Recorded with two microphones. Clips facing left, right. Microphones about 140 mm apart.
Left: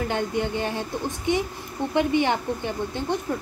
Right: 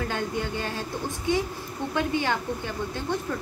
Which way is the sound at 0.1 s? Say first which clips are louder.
Left 4 dB; 20° left (ahead or behind).